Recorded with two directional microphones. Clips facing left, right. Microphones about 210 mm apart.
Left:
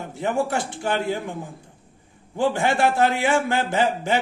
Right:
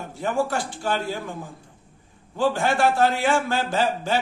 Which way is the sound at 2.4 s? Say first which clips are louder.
Left 1 dB; 20° left (ahead or behind).